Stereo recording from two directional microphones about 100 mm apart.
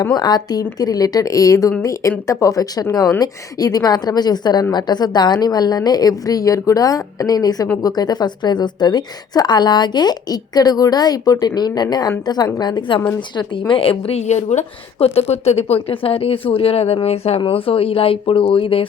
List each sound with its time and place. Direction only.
0.1 s a woman's voice: 45° left (ahead or behind)
13.5 s a woman's voice: 60° left (ahead or behind); by 17.4 s 90° left
17.4 s speech: 70° left (ahead or behind)